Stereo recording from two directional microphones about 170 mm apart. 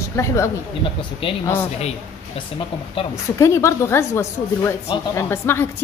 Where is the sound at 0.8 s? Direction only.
30° left (ahead or behind).